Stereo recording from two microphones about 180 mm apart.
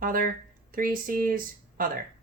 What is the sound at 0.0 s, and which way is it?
Speech, 50° right (ahead or behind).